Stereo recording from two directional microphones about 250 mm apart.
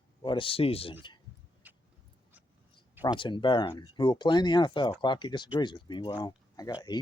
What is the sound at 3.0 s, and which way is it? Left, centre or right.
Speech, centre.